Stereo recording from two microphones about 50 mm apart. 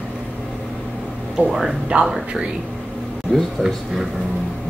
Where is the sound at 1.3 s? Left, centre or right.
Centre.